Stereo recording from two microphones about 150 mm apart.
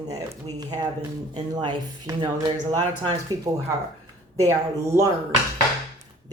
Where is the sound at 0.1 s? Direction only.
25° right (ahead or behind).